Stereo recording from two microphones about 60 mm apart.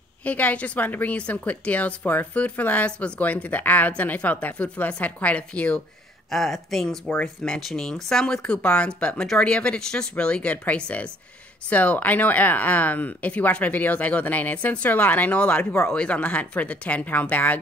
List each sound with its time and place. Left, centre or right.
0.2 s a woman's voice: left
6.3 s a woman's voice: centre; by 17.6 s left